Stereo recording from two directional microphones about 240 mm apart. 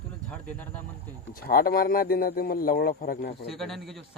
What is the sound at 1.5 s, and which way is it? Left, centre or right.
Speech, left.